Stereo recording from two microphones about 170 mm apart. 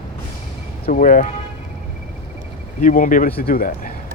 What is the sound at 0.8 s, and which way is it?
Speech, 50° left (ahead or behind).